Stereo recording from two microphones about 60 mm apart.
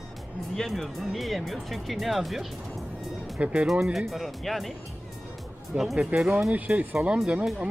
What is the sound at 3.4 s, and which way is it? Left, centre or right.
Speech, centre.